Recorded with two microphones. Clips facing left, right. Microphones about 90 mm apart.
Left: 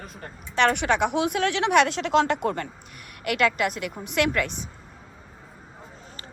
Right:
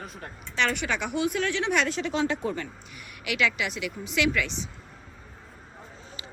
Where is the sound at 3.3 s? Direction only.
50° left (ahead or behind).